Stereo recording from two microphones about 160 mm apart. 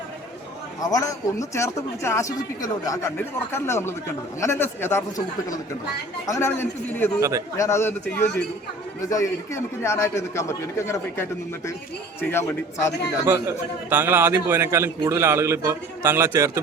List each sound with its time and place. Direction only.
0.8 s speech: 25° left (ahead or behind)
7.2 s a man's voice: 20° right (ahead or behind)
7.5 s speech: 20° left (ahead or behind)
13.2 s a man's voice: 15° right (ahead or behind)